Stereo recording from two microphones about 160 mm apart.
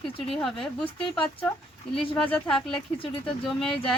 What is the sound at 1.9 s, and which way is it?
Speech, 35° left (ahead or behind).